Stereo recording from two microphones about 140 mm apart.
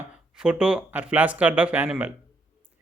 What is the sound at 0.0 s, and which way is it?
A man's voice, 10° right (ahead or behind).